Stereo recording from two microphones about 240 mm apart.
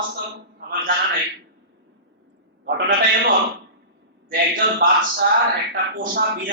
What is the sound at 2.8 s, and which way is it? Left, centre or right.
A man's voice, right.